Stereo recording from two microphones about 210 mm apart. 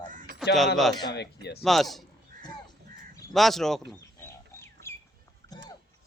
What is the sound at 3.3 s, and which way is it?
Speech, centre (ahead or behind).